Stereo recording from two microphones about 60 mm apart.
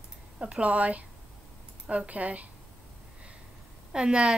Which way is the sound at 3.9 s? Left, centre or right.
Centre.